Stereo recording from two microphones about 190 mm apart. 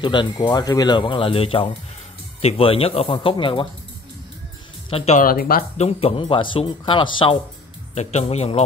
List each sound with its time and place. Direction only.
0.0 s speech: 25° left (ahead or behind)
4.8 s speech: 30° left (ahead or behind)
5.2 s speech: 50° left (ahead or behind)
5.8 s speech: 30° left (ahead or behind)
7.9 s speech: 35° left (ahead or behind)